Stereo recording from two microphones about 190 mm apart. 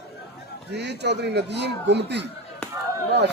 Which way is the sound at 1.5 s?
65° right (ahead or behind).